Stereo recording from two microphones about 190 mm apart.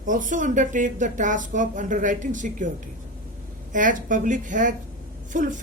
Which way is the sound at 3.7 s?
45° right (ahead or behind).